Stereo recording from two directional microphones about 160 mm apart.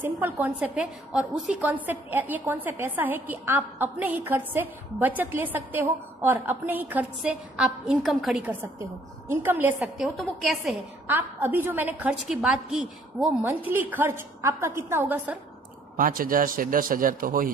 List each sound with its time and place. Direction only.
0.0 s a woman's voice: 10° right (ahead or behind)
10.0 s a woman's voice: centre (ahead or behind)
11.1 s a woman's voice: 10° right (ahead or behind)
16.0 s a man's voice: 60° right (ahead or behind)